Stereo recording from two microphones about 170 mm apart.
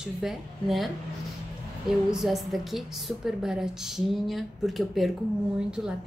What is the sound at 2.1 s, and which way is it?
A woman's voice, centre (ahead or behind).